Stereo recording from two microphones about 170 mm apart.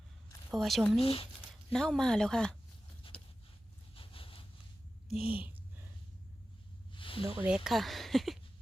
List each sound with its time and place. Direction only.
0.5 s speech: centre (ahead or behind)
1.0 s speech: 35° left (ahead or behind)
1.7 s speech: 5° left (ahead or behind)
3.9 s a sound: 30° left (ahead or behind)
5.1 s speech: 5° right (ahead or behind)
6.9 s a sound: 30° left (ahead or behind)
7.4 s speech: 5° right (ahead or behind)